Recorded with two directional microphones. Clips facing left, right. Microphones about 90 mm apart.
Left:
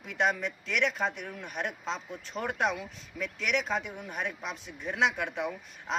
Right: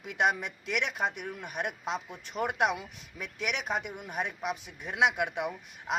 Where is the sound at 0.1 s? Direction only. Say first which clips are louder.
Even; 20° right (ahead or behind).